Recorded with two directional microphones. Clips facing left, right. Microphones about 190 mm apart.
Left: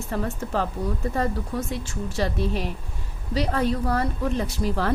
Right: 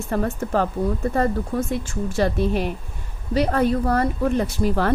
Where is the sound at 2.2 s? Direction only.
60° right (ahead or behind).